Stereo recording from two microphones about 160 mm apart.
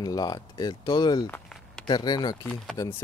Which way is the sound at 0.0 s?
25° left (ahead or behind).